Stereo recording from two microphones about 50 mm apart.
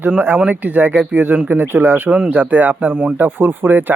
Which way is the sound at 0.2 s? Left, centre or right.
Right.